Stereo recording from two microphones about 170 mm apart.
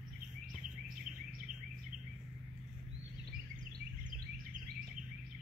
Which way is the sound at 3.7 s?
50° right (ahead or behind).